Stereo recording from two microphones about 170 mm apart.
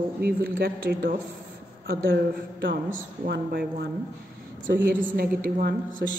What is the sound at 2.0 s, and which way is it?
A woman's voice, 85° right.